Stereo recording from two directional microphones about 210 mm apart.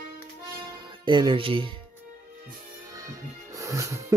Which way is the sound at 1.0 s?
20° right (ahead or behind).